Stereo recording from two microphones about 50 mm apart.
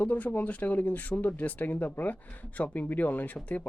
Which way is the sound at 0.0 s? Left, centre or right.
Left.